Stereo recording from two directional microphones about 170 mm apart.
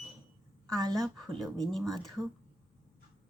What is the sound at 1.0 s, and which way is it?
A woman's voice, 5° left (ahead or behind).